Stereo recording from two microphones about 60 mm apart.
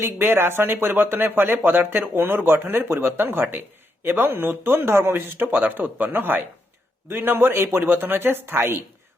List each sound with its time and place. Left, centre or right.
0.0 s speech: right